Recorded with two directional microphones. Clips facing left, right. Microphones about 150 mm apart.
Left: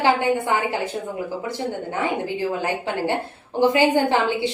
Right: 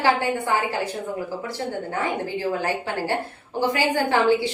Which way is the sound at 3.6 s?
20° left (ahead or behind).